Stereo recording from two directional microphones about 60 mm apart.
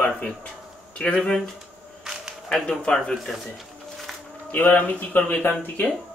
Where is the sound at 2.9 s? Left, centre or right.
Centre.